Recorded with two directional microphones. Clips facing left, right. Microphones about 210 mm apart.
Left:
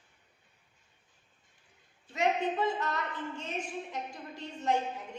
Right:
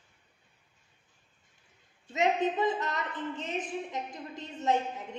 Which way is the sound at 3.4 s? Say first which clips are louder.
Right 3 dB; 20° right (ahead or behind).